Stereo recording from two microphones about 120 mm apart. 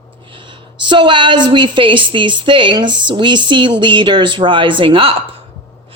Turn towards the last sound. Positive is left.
turn(degrees=-45)  # may be behind; listen again after turning